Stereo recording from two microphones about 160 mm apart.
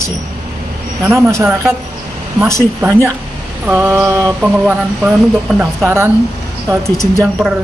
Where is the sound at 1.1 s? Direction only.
15° right (ahead or behind).